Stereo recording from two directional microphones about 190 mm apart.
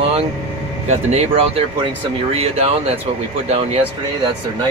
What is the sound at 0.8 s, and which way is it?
Speech, 35° right (ahead or behind).